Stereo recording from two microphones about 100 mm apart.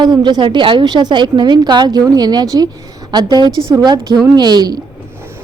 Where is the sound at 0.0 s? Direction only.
45° right (ahead or behind).